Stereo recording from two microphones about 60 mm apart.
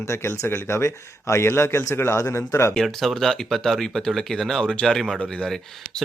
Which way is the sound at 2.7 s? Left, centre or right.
Centre.